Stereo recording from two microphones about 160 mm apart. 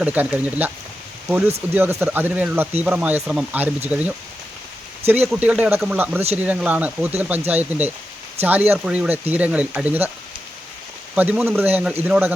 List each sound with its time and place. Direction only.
0.0 s speech: 10° right (ahead or behind)
1.7 s speech: 15° right (ahead or behind)
5.3 s speech: 5° right (ahead or behind)
11.1 s speech: 10° right (ahead or behind)